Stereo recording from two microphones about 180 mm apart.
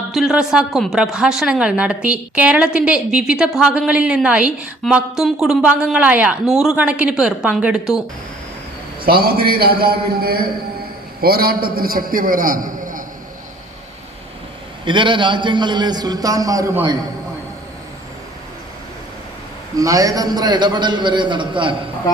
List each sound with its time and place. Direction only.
0.1 s a woman's voice: centre (ahead or behind)
9.0 s a man's voice: 55° right (ahead or behind)
14.8 s a man's voice: 25° right (ahead or behind)
19.7 s a man's voice: 20° right (ahead or behind)